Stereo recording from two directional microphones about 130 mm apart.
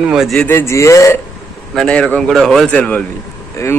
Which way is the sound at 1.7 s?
5° left (ahead or behind).